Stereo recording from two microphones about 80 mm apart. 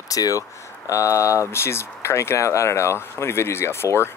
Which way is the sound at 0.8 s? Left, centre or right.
Left.